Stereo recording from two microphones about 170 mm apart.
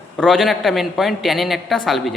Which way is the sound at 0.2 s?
5° left (ahead or behind).